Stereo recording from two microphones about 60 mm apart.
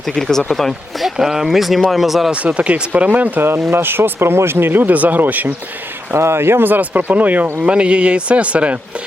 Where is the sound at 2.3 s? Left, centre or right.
Right.